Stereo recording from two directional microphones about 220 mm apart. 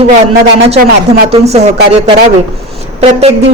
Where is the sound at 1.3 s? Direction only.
30° right (ahead or behind).